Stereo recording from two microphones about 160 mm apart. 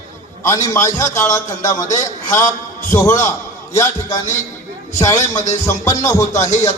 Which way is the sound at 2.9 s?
20° left (ahead or behind).